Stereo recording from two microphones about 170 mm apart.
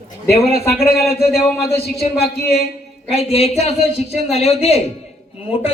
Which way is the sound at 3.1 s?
35° left (ahead or behind).